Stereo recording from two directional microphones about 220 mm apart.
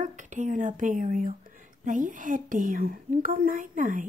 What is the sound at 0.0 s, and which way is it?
A woman's voice, 35° right (ahead or behind).